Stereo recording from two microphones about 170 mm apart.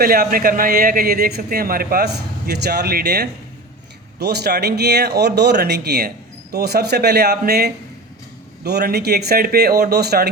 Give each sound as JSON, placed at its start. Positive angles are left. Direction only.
{"t": 0.0, "sound": "a man's voice", "side_deg": -60}
{"t": 2.5, "sound": "speech", "side_deg": -70}